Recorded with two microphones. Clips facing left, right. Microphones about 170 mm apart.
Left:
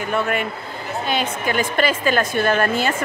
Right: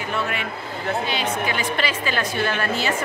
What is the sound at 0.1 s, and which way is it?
A woman's voice, 50° left (ahead or behind).